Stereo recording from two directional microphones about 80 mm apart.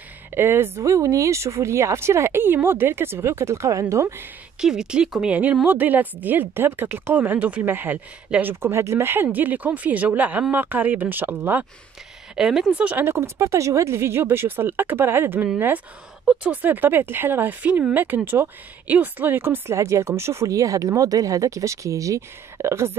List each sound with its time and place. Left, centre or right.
0.3 s speech: right
4.6 s a woman's voice: centre; by 11.6 s right
12.4 s speech: centre
12.7 s a woman's voice: centre
13.0 s a woman's voice: right